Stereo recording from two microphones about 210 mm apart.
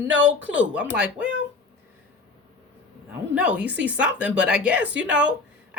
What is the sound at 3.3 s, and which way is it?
A woman's voice, 5° right (ahead or behind).